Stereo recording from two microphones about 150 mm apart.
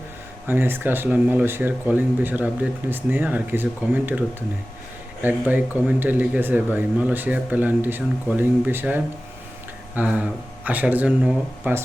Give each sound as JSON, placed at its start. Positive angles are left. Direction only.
{"t": 0.4, "sound": "speech", "side_deg": -15}